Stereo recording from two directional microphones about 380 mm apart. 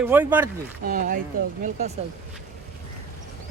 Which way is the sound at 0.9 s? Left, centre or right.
Right.